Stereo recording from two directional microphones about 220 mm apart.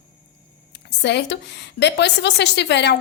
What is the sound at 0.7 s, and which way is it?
A woman's voice, 50° left (ahead or behind).